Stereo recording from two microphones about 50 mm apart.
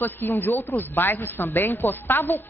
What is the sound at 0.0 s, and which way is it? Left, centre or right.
A woman's voice, left.